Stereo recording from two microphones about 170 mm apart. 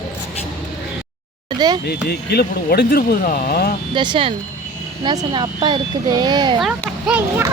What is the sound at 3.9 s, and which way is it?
Speech, 25° right (ahead or behind).